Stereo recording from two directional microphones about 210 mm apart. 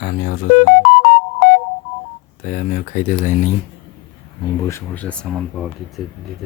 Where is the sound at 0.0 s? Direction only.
55° left (ahead or behind).